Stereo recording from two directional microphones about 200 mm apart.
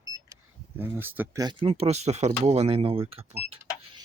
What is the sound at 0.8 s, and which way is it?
Speech, 10° right (ahead or behind).